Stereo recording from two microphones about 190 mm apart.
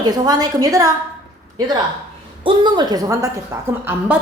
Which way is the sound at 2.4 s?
25° right (ahead or behind).